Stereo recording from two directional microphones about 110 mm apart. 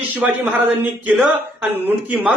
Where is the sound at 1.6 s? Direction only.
10° right (ahead or behind).